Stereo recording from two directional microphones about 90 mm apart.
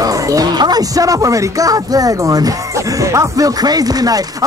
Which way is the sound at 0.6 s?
50° right (ahead or behind).